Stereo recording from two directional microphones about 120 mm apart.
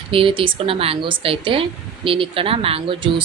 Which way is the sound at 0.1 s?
50° right (ahead or behind).